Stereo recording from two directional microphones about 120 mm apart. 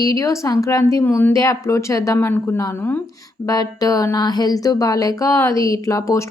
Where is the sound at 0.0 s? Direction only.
30° left (ahead or behind).